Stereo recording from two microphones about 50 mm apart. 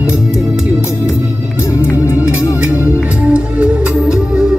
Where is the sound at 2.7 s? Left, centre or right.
Right.